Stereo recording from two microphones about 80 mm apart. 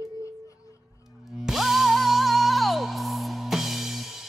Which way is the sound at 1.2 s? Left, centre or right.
Centre.